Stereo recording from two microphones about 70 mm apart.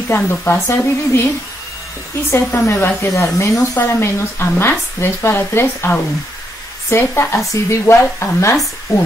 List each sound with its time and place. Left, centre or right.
0.1 s speech: left
2.3 s speech: left
8.9 s speech: left